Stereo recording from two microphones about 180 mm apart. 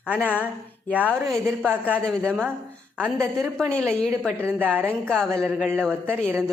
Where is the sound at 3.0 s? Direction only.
15° right (ahead or behind).